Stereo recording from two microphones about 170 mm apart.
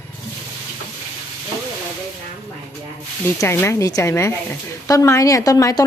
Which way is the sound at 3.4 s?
15° left (ahead or behind).